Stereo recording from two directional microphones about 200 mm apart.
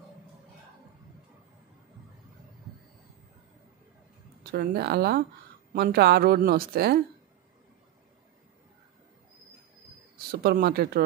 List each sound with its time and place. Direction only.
4.4 s a woman's voice: 50° right (ahead or behind)
10.1 s speech: 50° right (ahead or behind)